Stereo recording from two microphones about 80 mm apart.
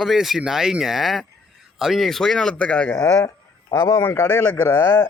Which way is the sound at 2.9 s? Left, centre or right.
Left.